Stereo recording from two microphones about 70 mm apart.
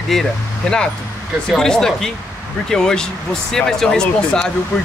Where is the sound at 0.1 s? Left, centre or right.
Centre.